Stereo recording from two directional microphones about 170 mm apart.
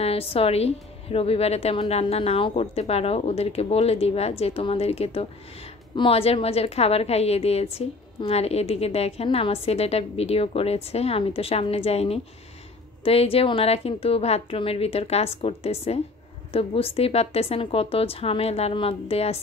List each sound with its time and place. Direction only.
0.0 s a woman's voice: 35° left (ahead or behind)